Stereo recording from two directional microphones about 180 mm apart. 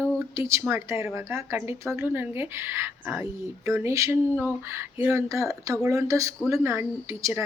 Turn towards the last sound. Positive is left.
turn(degrees=-15)  # may be behind; listen again after turning